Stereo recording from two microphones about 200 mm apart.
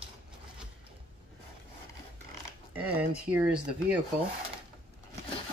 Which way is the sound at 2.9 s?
5° right (ahead or behind).